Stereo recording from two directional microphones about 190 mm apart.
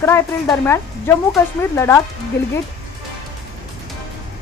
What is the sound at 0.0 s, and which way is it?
Speech, 15° left (ahead or behind).